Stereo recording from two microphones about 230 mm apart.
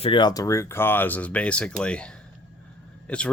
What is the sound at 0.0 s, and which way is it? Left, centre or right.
Speech, centre.